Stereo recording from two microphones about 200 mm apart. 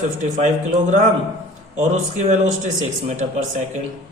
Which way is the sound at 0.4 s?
35° right (ahead or behind).